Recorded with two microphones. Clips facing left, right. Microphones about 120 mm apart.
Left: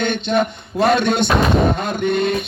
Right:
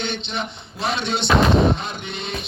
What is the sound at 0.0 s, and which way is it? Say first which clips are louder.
Artillery fire: left 9 dB; 50° left (ahead or behind).